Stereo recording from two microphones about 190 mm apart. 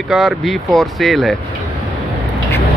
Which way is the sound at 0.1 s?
Centre (ahead or behind).